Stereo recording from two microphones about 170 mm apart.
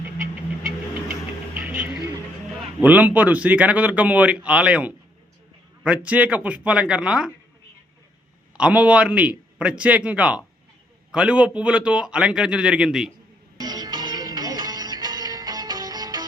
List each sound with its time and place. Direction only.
1.6 s music: 10° right (ahead or behind)
2.8 s speech: 10° right (ahead or behind)
8.5 s a man's voice: 5° right (ahead or behind)
13.6 s music: 25° right (ahead or behind)